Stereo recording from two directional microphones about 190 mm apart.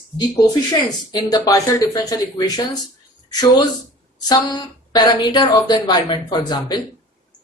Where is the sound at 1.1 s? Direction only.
20° left (ahead or behind).